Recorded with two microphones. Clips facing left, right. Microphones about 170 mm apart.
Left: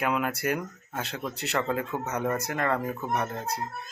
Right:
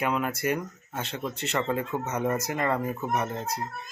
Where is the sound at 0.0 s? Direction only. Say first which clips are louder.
Even; centre (ahead or behind).